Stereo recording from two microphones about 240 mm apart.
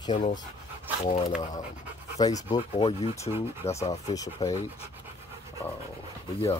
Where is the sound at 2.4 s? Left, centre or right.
Centre.